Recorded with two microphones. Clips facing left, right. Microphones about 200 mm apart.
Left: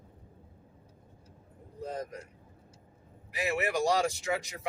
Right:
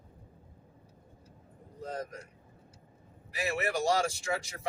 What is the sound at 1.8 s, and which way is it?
Speech, 15° left (ahead or behind).